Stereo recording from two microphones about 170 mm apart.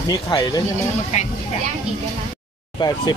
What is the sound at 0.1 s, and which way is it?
Speech, 25° left (ahead or behind).